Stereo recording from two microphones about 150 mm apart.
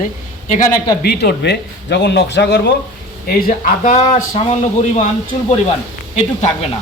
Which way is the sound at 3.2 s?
65° left (ahead or behind).